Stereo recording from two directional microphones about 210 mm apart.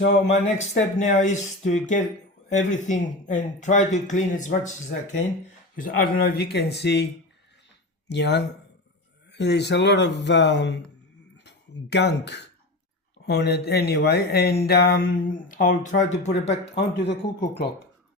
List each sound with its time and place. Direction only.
0.0 s speech: 35° left (ahead or behind); by 7.1 s 50° left (ahead or behind)
8.1 s speech: 55° left (ahead or behind); by 16.6 s 30° left (ahead or behind)
16.7 s speech: 55° left (ahead or behind)